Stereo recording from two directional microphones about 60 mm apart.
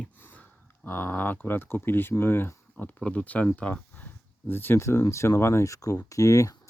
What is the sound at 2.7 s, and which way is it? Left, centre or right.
Speech, left.